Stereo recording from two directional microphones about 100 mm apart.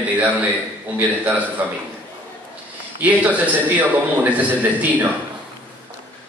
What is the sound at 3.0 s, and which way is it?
A man's voice, 15° right (ahead or behind).